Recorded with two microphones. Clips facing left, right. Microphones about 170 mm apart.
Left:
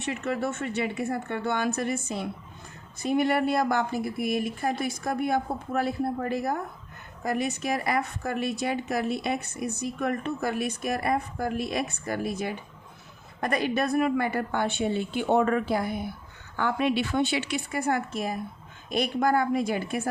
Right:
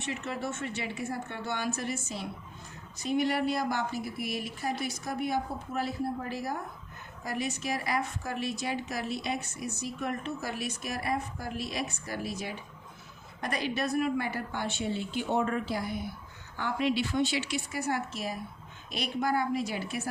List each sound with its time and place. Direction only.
0.0 s a woman's voice: 60° left (ahead or behind)